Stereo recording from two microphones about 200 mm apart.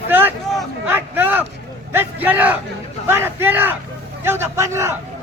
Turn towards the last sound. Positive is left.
turn(degrees=-15)  # may be behind; listen again after turning